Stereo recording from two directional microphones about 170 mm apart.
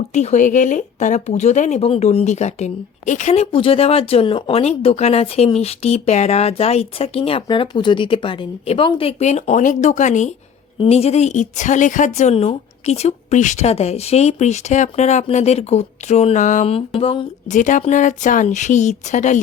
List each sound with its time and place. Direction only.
0.1 s speech: 45° left (ahead or behind)
17.5 s speech: 50° left (ahead or behind)